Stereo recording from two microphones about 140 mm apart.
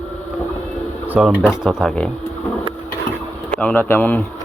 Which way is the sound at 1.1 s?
5° right (ahead or behind).